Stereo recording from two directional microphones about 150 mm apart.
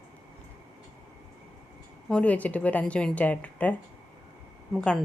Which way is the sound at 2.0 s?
5° left (ahead or behind).